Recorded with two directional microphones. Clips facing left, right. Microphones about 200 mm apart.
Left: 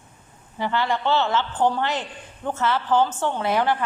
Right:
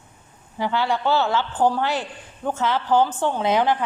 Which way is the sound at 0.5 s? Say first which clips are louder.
Right 1 dB; 10° right (ahead or behind).